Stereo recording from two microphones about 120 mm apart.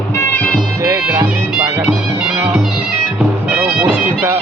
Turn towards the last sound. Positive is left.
turn(degrees=-20)  # may be behind; listen again after turning